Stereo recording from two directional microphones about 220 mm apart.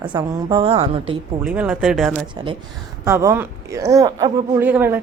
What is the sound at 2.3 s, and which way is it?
A woman's voice, 25° right (ahead or behind).